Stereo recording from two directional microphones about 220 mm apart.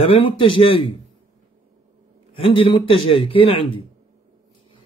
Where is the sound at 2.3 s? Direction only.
25° left (ahead or behind).